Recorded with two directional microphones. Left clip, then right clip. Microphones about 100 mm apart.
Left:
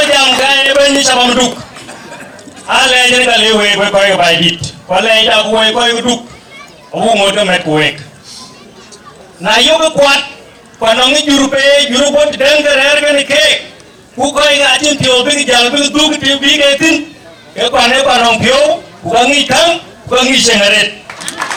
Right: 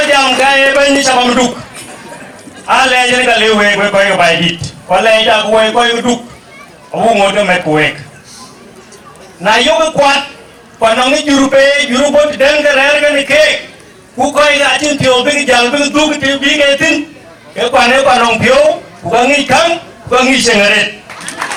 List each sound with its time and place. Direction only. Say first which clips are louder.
0.0 s a sound: even; 15° left (ahead or behind)
2.8 s a man's voice: left 3 dB; 15° left (ahead or behind)
9.5 s a man's voice: left 1 dB; 15° left (ahead or behind)
10.9 s a man's voice: left 4 dB; 15° left (ahead or behind)
21.4 s run: left 1 dB; 5° left (ahead or behind)